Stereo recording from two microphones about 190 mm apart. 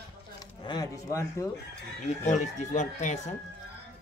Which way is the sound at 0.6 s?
20° left (ahead or behind).